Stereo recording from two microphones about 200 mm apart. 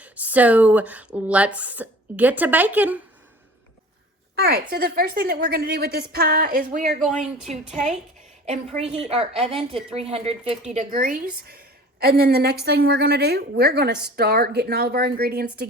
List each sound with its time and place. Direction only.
0.0 s speech: 5° right (ahead or behind)
4.4 s a woman's voice: 50° right (ahead or behind)
8.4 s a woman's voice: 30° right (ahead or behind)
10.8 s a woman's voice: 45° right (ahead or behind)